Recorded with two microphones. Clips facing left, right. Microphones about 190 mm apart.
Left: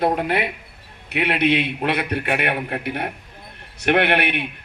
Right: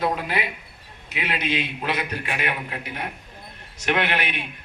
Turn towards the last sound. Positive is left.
turn(degrees=60)  # may be behind; listen again after turning